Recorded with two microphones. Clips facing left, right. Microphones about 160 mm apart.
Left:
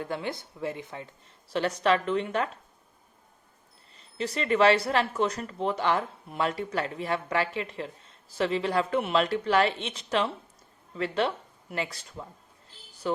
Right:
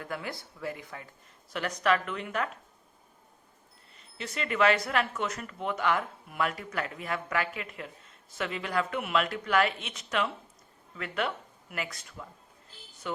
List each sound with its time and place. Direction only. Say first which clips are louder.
0.0 s a woman's voice: left 5 dB; 25° left (ahead or behind)
3.9 s speech: left 6 dB; 35° left (ahead or behind)